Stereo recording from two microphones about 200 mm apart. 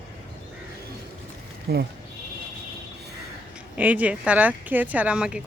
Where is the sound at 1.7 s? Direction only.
50° right (ahead or behind).